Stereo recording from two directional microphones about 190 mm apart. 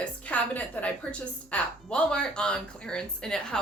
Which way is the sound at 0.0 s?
10° left (ahead or behind).